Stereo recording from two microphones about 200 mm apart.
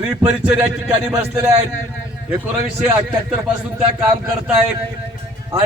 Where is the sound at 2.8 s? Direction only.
10° right (ahead or behind).